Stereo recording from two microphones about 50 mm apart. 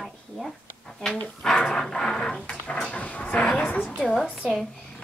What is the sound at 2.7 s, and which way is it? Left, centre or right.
A woman's voice, left.